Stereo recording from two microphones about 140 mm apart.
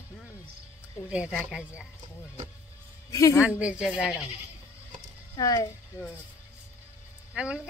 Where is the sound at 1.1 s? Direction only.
10° right (ahead or behind).